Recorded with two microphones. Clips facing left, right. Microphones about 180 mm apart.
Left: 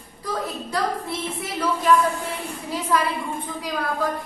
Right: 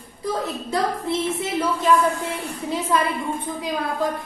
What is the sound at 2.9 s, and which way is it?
Speech, 25° right (ahead or behind).